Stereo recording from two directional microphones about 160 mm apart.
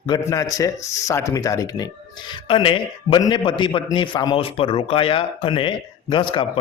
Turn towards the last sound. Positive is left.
turn(degrees=30)  # may be behind; listen again after turning